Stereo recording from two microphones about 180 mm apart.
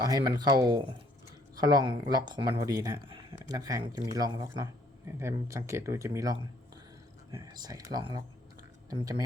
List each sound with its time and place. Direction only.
0.0 s speech: 20° right (ahead or behind)